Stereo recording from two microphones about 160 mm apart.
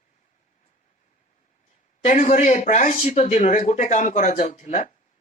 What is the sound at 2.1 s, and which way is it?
Speech, 50° left (ahead or behind).